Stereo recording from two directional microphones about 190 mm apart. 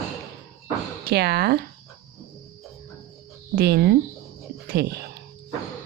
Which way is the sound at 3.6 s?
55° right (ahead or behind).